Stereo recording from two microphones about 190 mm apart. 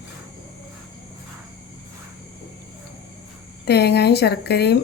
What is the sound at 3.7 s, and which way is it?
Speech, 60° left (ahead or behind).